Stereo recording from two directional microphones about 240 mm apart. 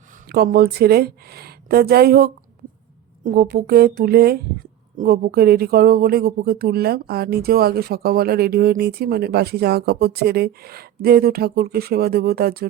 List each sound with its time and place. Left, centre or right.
0.3 s speech: right